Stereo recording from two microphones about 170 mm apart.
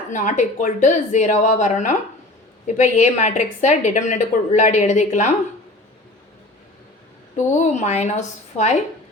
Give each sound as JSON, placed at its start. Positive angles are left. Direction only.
{"t": 0.1, "sound": "a woman's voice", "side_deg": 45}
{"t": 7.3, "sound": "a woman's voice", "side_deg": 45}